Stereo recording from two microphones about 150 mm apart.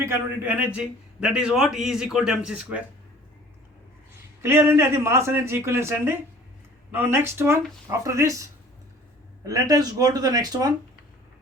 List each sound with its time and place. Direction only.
0.0 s a man's voice: 15° right (ahead or behind)
4.4 s speech: 15° right (ahead or behind)